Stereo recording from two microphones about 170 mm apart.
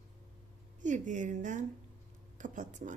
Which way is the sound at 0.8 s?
45° right (ahead or behind).